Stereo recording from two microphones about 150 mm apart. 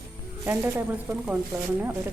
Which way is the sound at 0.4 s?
10° right (ahead or behind).